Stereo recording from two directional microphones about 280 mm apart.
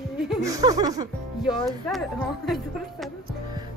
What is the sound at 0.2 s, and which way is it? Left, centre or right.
Speech, centre.